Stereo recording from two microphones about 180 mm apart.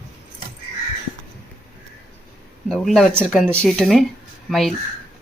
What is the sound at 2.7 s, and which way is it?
Speech, centre (ahead or behind).